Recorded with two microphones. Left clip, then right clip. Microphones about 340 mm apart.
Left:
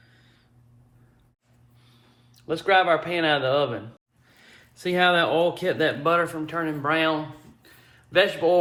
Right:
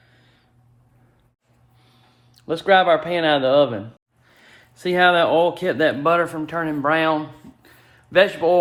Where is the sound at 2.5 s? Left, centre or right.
Right.